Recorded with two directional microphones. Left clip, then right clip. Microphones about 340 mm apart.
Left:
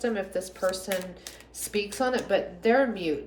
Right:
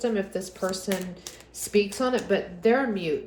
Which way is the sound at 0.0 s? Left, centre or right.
Centre.